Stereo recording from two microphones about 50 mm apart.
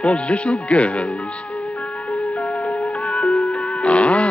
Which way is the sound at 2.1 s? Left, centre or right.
Left.